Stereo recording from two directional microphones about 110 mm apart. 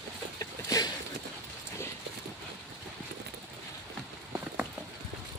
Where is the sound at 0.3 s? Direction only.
35° left (ahead or behind).